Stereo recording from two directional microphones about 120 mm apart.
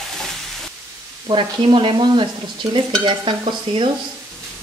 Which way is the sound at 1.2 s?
40° right (ahead or behind).